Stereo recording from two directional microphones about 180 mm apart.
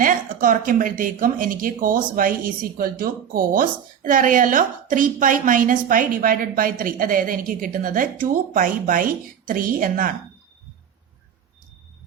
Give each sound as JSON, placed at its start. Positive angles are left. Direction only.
{"t": 0.0, "sound": "speech", "side_deg": -50}